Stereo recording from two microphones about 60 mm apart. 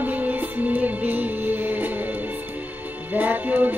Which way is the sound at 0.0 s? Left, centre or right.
Right.